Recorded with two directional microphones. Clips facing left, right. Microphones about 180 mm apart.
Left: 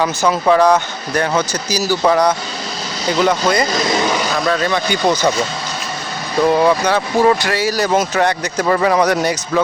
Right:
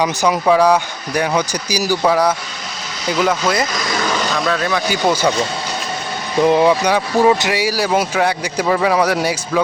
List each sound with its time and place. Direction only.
0.0 s speech: 15° right (ahead or behind)
3.8 s speech: 20° left (ahead or behind)
4.3 s speech: centre (ahead or behind)
6.4 s speech: 15° right (ahead or behind)